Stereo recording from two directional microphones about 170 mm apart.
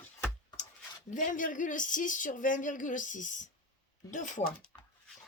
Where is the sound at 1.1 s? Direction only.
50° left (ahead or behind).